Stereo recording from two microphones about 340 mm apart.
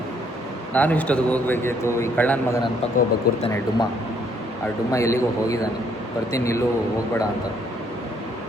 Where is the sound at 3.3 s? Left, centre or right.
Left.